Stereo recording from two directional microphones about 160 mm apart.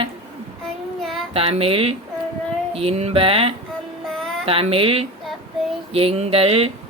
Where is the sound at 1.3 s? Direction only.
35° right (ahead or behind).